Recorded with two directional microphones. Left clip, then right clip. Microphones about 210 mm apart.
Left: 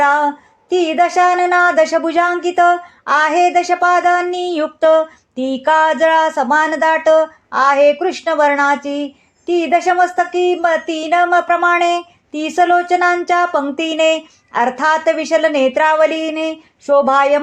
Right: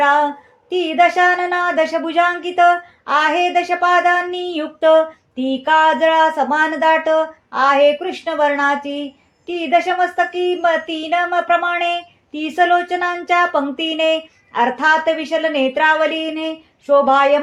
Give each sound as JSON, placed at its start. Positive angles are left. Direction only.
{"t": 0.0, "sound": "female singing", "side_deg": 30}
{"t": 0.7, "sound": "speech", "side_deg": 30}